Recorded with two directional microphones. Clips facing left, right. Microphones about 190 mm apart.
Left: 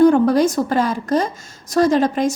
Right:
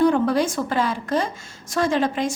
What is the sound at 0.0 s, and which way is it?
A woman's voice, 45° left (ahead or behind).